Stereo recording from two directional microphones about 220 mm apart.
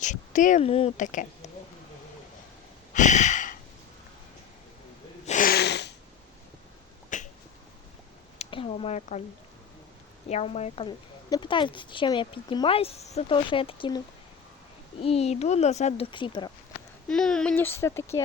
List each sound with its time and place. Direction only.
0.0 s speech: 35° left (ahead or behind)
2.9 s sigh: 35° left (ahead or behind)
5.2 s a sound: 35° left (ahead or behind)
7.1 s finger snapping: 35° left (ahead or behind)
8.4 s a sound: 25° left (ahead or behind)
10.2 s a woman's voice: 30° left (ahead or behind)
15.0 s a woman's voice: 25° left (ahead or behind)
17.1 s speech: 5° left (ahead or behind)